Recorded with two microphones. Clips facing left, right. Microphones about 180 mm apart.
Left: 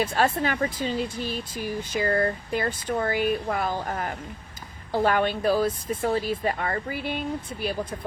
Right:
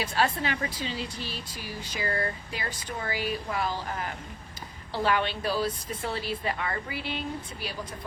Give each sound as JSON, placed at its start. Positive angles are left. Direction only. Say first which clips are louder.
{"t": 0.0, "sound": "speech", "louder": "left 4 dB", "side_deg": 50}